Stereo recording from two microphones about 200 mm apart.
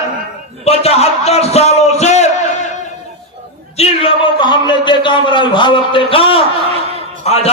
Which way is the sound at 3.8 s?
25° left (ahead or behind).